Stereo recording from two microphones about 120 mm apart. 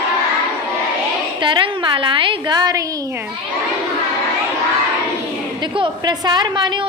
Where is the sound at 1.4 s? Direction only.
45° right (ahead or behind); by 3.2 s 30° right (ahead or behind).